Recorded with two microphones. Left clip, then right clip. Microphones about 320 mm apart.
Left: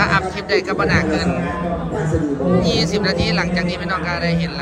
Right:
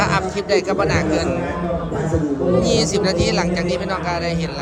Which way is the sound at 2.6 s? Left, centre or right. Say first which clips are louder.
Right 1 dB; centre.